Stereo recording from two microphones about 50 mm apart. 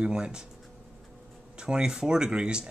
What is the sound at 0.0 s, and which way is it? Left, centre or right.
Speech, centre.